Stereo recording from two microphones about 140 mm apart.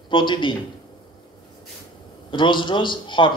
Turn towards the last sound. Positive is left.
turn(degrees=35)  # may be behind; listen again after turning